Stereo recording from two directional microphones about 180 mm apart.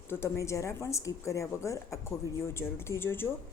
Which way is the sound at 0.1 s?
15° left (ahead or behind).